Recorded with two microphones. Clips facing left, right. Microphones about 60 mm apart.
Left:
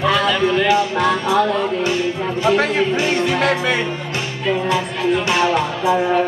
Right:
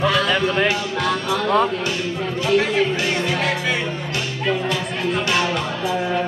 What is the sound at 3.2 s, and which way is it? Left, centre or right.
Music, left.